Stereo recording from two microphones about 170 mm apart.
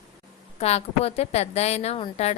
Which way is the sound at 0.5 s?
40° left (ahead or behind).